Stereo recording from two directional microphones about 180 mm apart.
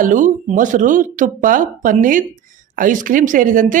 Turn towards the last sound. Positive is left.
turn(degrees=-45)  # may be behind; listen again after turning